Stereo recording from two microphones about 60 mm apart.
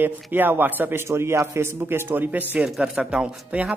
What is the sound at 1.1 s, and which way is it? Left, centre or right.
Speech, right.